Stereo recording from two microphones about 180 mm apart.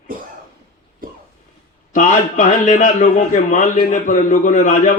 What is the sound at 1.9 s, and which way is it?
A man's voice, 45° left (ahead or behind).